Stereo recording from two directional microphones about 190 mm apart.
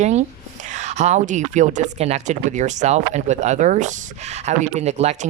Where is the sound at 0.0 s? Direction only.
35° right (ahead or behind).